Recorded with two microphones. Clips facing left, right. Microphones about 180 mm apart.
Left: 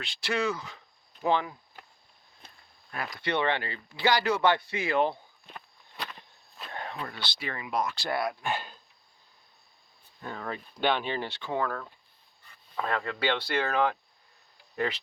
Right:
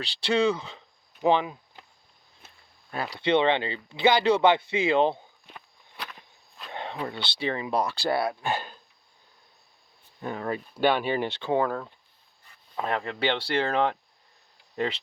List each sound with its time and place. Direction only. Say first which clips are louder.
0.0 s speech: right 6 dB; 30° right (ahead or behind)
2.9 s speech: right 7 dB; 30° right (ahead or behind)
6.7 s speech: right 5 dB; 20° right (ahead or behind)
10.2 s speech: right 6 dB; 20° right (ahead or behind)
11.3 s speech: right 6 dB; 30° right (ahead or behind)